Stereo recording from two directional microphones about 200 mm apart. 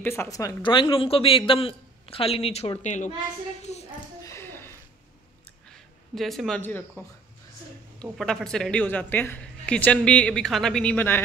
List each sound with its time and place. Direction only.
0.0 s a man's voice: 10° left (ahead or behind); by 3.1 s 35° left (ahead or behind)
4.2 s a sound: 15° left (ahead or behind)
5.7 s speech: centre (ahead or behind)
8.2 s a woman's voice: centre (ahead or behind)